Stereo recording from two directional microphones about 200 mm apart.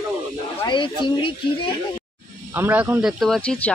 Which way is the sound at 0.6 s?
25° left (ahead or behind).